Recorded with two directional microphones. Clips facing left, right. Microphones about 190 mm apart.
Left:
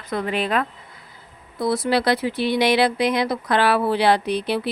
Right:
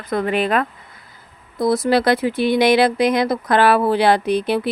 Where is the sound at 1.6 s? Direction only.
45° right (ahead or behind).